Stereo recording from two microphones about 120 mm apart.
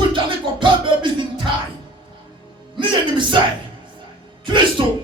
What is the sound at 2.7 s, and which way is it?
Music, 40° right (ahead or behind).